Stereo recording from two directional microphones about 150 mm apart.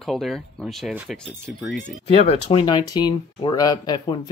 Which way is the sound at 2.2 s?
35° left (ahead or behind).